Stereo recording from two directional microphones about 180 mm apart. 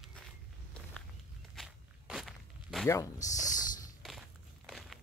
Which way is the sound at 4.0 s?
Centre (ahead or behind).